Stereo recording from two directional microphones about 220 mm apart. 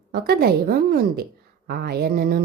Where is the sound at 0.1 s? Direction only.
45° right (ahead or behind).